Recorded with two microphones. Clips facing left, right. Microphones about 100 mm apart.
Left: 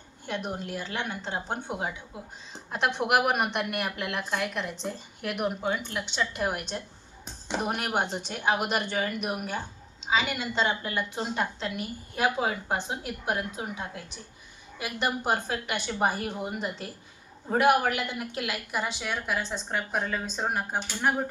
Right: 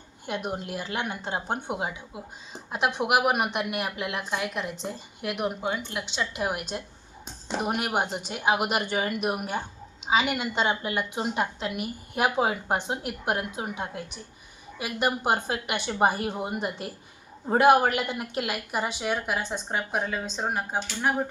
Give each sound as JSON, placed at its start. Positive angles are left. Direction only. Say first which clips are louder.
{"t": 0.3, "sound": "a woman's voice", "louder": "right 2 dB", "side_deg": -10}
{"t": 14.8, "sound": "a woman's voice", "louder": "right 3 dB", "side_deg": -15}